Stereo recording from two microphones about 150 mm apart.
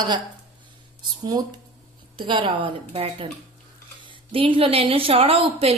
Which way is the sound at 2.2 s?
35° right (ahead or behind).